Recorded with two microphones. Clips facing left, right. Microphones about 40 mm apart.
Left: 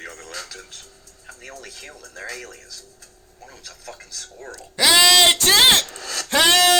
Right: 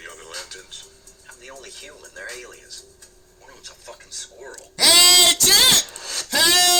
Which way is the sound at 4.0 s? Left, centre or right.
Left.